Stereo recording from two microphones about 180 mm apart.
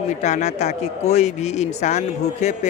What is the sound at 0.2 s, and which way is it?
Speech, 40° left (ahead or behind).